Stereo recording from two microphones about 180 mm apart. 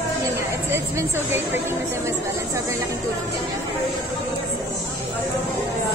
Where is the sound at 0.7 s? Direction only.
15° right (ahead or behind).